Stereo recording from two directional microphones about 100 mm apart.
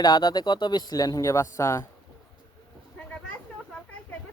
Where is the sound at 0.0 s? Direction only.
45° left (ahead or behind); by 1.8 s 30° left (ahead or behind).